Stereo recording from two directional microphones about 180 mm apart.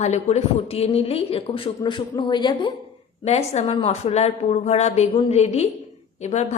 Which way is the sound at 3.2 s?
35° left (ahead or behind).